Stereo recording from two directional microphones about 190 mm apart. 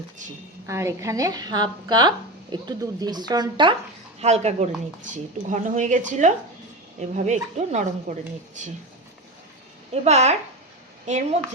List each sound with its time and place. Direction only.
0.7 s speech: 15° right (ahead or behind)
4.2 s speech: 35° right (ahead or behind)
9.9 s a woman's voice: 35° right (ahead or behind)